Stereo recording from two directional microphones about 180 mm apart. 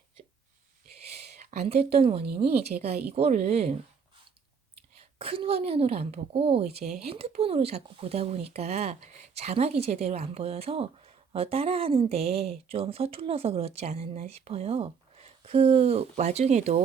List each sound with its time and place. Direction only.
1.7 s speech: 35° right (ahead or behind)
5.2 s speech: 30° right (ahead or behind)